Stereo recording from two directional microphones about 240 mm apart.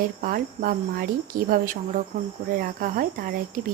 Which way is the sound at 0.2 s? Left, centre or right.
Right.